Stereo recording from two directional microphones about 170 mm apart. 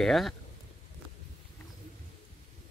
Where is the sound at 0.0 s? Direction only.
Centre (ahead or behind).